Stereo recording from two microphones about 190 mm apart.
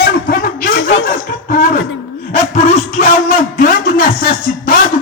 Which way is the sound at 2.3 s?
40° left (ahead or behind).